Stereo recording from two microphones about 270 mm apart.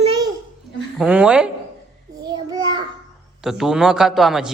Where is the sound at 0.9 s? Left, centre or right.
Centre.